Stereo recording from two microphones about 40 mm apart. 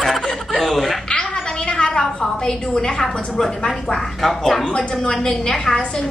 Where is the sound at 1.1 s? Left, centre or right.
Left.